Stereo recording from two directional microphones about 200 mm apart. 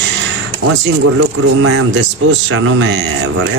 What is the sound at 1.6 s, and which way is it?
Speech, 65° right (ahead or behind).